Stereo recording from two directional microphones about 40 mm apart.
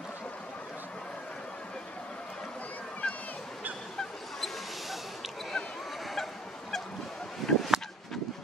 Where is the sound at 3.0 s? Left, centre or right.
Left.